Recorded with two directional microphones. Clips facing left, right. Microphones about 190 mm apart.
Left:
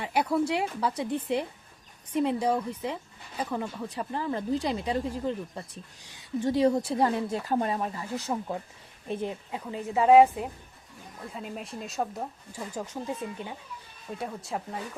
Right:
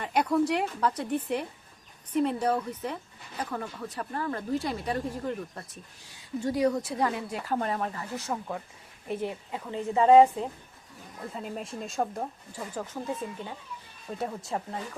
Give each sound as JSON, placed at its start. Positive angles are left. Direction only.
{"t": 0.0, "sound": "speech", "side_deg": 10}
{"t": 2.1, "sound": "a woman's voice", "side_deg": 15}
{"t": 11.3, "sound": "speech", "side_deg": 0}
{"t": 14.2, "sound": "speech", "side_deg": 0}